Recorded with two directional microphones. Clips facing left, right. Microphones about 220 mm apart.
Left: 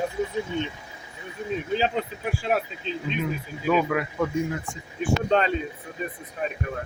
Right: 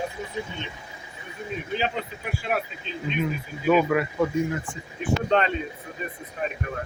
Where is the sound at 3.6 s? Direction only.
5° right (ahead or behind).